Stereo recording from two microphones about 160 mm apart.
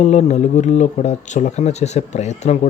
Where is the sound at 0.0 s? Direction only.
45° left (ahead or behind).